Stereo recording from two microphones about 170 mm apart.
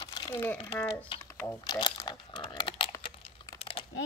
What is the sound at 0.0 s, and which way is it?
Crumpling, 25° left (ahead or behind).